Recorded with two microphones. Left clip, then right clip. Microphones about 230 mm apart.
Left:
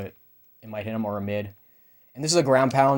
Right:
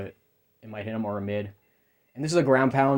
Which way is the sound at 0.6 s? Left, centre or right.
Left.